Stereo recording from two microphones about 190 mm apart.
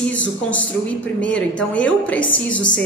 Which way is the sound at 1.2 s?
5° left (ahead or behind).